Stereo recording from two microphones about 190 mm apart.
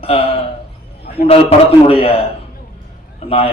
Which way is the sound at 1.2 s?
30° left (ahead or behind).